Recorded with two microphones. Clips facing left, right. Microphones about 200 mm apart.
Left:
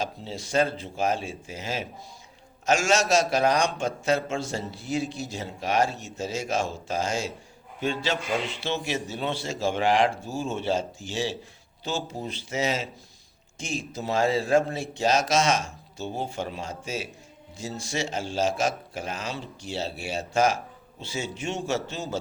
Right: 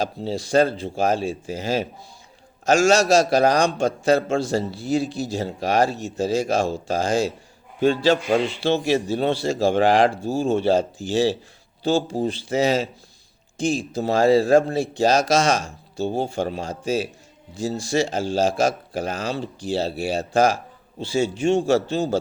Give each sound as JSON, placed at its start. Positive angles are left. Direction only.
{"t": 0.0, "sound": "a man's voice", "side_deg": -35}